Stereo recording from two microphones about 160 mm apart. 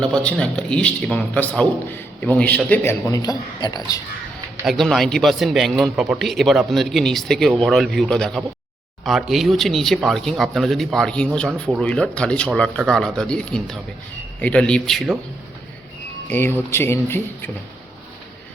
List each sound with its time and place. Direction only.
0.0 s a man's voice: 5° left (ahead or behind)
3.1 s a man's voice: 25° left (ahead or behind)
4.6 s a man's voice: centre (ahead or behind)
16.3 s a man's voice: 15° left (ahead or behind)